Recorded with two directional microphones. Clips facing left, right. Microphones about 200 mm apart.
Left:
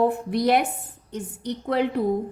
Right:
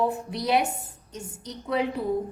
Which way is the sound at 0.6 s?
60° left (ahead or behind).